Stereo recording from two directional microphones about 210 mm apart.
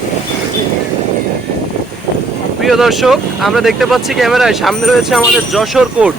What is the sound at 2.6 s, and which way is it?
Speech, centre (ahead or behind).